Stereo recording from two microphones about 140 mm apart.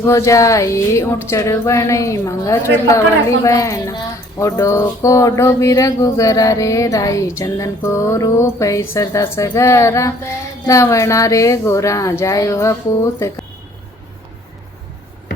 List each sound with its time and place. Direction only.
0.1 s speech: 20° left (ahead or behind)